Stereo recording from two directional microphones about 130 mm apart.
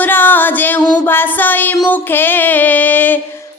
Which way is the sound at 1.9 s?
15° left (ahead or behind).